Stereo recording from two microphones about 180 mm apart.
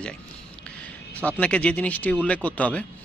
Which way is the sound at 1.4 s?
5° left (ahead or behind).